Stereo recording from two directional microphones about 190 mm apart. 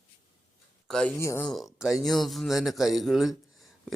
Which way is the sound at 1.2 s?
15° left (ahead or behind).